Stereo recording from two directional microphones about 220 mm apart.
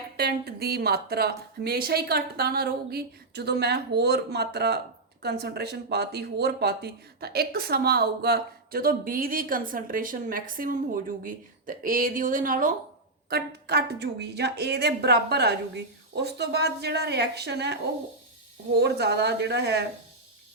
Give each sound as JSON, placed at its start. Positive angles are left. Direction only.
{"t": 0.2, "sound": "speech", "side_deg": -45}
{"t": 13.3, "sound": "speech", "side_deg": -50}
{"t": 18.8, "sound": "speech", "side_deg": -50}